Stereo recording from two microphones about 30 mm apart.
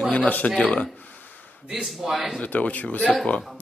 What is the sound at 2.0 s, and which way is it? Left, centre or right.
Speech, centre.